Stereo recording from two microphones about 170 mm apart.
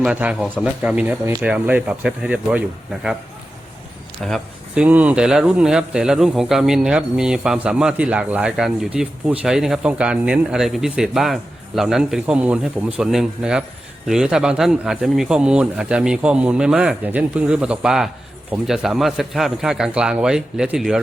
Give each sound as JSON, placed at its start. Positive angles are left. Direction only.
{"t": 0.0, "sound": "speech", "side_deg": -5}
{"t": 4.3, "sound": "speech", "side_deg": -5}